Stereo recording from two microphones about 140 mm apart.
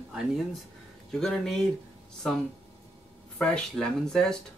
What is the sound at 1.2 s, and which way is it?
Speech, 5° left (ahead or behind).